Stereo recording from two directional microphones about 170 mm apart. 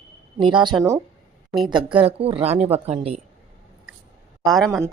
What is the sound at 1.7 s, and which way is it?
A woman's voice, 30° right (ahead or behind).